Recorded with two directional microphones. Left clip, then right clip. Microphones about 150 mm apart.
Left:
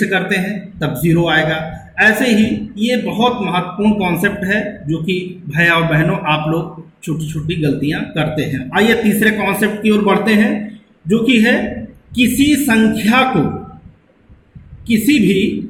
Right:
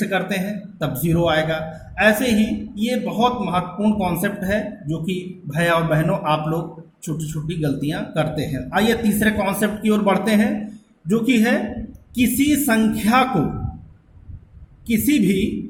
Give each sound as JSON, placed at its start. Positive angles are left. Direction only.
{"t": 0.0, "sound": "speech", "side_deg": -35}
{"t": 14.8, "sound": "speech", "side_deg": -40}